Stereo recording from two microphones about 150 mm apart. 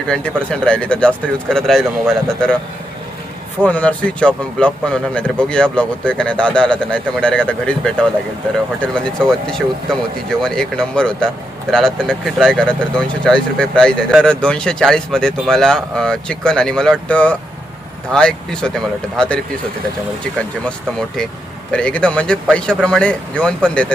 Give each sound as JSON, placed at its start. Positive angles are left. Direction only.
{"t": 0.1, "sound": "speech", "side_deg": 5}
{"t": 3.6, "sound": "a man's voice", "side_deg": 10}
{"t": 21.7, "sound": "a man's voice", "side_deg": 5}